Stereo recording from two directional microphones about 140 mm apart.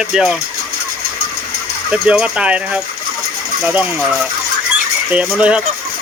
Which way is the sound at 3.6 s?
10° right (ahead or behind).